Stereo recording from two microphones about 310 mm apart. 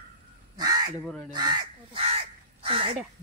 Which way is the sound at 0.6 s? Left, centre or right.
Centre.